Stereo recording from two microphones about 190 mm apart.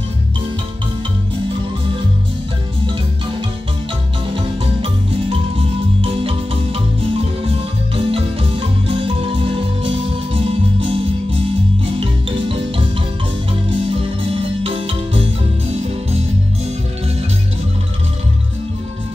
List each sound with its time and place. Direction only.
5.9 s music: 30° right (ahead or behind)
7.9 s music: 30° right (ahead or behind)
12.0 s music: 30° right (ahead or behind)
14.6 s marimba: 30° right (ahead or behind)